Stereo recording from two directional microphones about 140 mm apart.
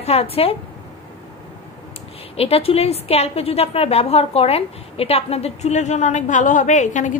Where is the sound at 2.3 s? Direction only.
45° left (ahead or behind).